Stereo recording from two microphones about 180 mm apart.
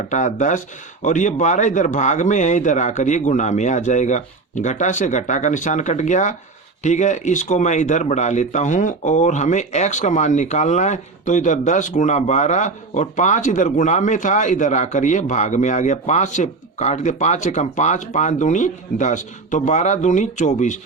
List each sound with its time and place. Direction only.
0.1 s speech: 40° left (ahead or behind)